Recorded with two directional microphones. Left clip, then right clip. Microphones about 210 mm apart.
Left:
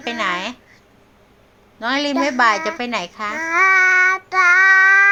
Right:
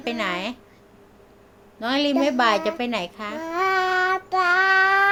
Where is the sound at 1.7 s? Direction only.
15° right (ahead or behind).